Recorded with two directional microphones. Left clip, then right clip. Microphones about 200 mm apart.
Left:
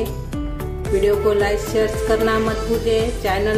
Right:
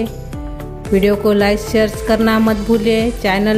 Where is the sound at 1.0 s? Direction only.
40° right (ahead or behind).